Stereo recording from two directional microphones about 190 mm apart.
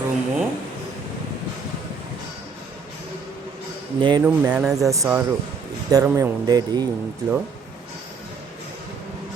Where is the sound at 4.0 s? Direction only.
25° right (ahead or behind).